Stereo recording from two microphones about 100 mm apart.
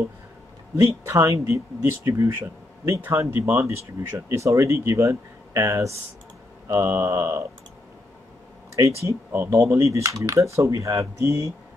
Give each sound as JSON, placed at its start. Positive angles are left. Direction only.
{"t": 1.0, "sound": "speech", "side_deg": -30}
{"t": 8.7, "sound": "speech", "side_deg": -30}